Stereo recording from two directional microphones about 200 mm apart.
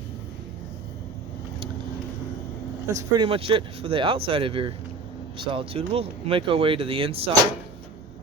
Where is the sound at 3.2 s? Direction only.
25° right (ahead or behind).